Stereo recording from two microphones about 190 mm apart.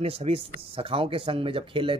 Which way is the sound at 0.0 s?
30° right (ahead or behind).